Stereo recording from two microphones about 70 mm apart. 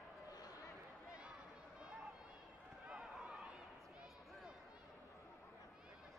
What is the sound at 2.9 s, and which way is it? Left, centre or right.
Run, centre.